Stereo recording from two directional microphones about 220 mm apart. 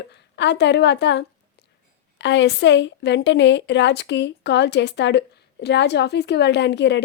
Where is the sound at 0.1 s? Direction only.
50° left (ahead or behind).